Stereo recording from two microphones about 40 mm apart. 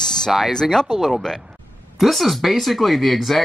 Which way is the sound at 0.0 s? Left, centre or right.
Centre.